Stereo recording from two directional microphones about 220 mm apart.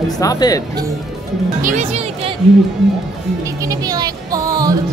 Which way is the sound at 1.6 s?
30° right (ahead or behind).